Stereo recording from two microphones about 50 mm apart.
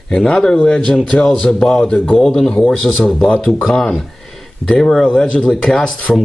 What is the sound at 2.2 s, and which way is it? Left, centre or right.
A man's voice, centre.